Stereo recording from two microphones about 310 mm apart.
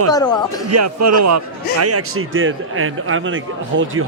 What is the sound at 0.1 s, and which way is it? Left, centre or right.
Speech, centre.